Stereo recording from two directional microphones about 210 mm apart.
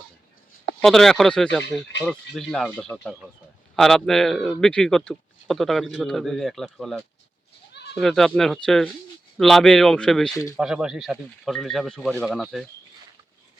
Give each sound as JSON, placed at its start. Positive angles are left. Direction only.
{"t": 0.8, "sound": "a man's voice", "side_deg": 0}
{"t": 7.7, "sound": "goat", "side_deg": 55}
{"t": 7.9, "sound": "a man's voice", "side_deg": 0}